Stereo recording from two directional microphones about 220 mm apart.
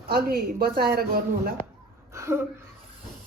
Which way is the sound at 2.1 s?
10° right (ahead or behind).